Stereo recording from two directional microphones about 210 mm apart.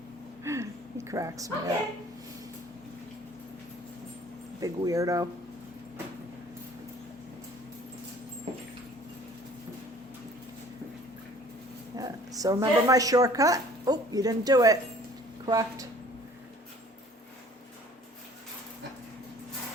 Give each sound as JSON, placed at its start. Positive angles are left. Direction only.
{"t": 0.4, "sound": "a sound", "side_deg": -15}
{"t": 4.6, "sound": "speech", "side_deg": -15}
{"t": 11.9, "sound": "speech", "side_deg": -15}